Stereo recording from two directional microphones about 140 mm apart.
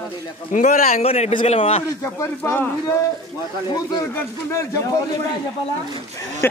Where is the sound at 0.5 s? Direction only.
60° left (ahead or behind).